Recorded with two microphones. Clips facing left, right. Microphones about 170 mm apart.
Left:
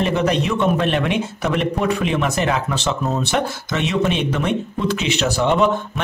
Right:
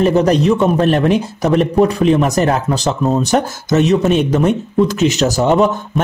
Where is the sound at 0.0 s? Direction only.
40° right (ahead or behind).